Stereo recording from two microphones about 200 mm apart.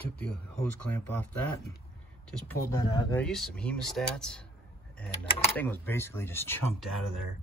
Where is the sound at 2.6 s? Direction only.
20° left (ahead or behind).